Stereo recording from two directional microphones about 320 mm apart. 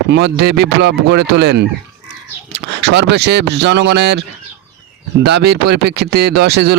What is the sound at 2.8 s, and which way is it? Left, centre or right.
Speech, right.